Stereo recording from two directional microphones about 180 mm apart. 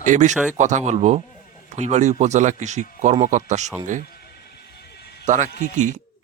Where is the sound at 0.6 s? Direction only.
40° right (ahead or behind).